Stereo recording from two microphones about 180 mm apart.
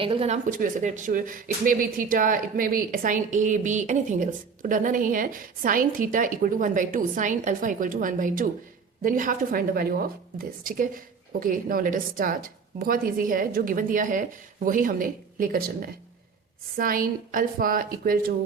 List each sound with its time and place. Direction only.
0.0 s speech: 30° right (ahead or behind)
0.4 s speech: 45° right (ahead or behind)